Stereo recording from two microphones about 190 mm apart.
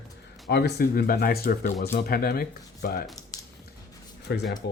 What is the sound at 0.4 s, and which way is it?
Speech, 60° left (ahead or behind).